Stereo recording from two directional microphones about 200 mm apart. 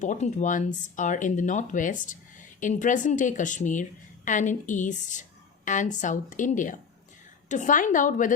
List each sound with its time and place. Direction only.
0.0 s speech: 35° left (ahead or behind)